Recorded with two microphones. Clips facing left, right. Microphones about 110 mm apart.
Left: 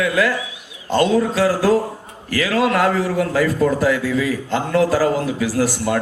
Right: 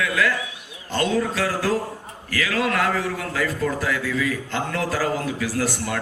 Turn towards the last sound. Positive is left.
turn(degrees=30)  # may be behind; listen again after turning